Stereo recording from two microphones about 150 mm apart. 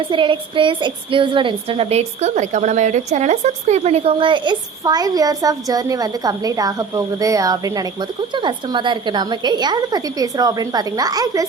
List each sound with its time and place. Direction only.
0.1 s a woman's voice: 35° right (ahead or behind)